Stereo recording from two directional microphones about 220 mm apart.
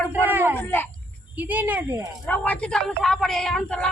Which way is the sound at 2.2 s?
5° left (ahead or behind).